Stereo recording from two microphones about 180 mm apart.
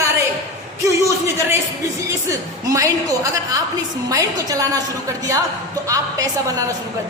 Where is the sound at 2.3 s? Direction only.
15° right (ahead or behind).